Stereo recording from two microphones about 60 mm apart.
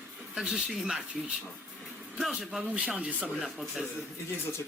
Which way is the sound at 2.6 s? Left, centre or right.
Right.